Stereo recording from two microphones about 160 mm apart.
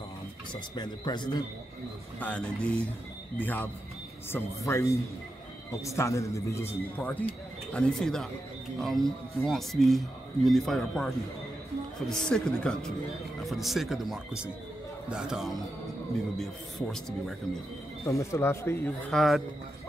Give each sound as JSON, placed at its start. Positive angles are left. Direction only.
{"t": 0.5, "sound": "a man's voice", "side_deg": 25}
{"t": 2.1, "sound": "a man's voice", "side_deg": 10}
{"t": 18.0, "sound": "speech", "side_deg": 20}
{"t": 19.1, "sound": "a man's voice", "side_deg": 0}